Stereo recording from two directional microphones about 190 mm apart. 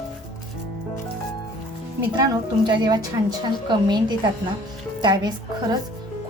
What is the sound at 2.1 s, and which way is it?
Speech, 20° right (ahead or behind).